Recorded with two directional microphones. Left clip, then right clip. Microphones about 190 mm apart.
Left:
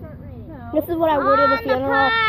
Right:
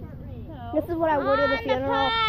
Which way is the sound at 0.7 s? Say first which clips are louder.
Left 5 dB; 30° left (ahead or behind).